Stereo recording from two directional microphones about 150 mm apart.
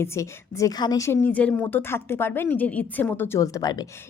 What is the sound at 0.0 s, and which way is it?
A woman's voice, 20° left (ahead or behind).